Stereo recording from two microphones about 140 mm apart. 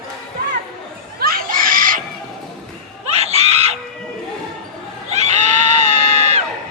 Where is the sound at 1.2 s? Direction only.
90° right.